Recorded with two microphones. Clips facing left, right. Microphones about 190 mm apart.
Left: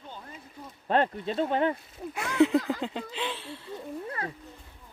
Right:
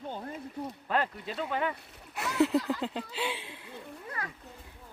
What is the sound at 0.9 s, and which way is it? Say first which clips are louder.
Speech: left 7 dB; 30° left (ahead or behind).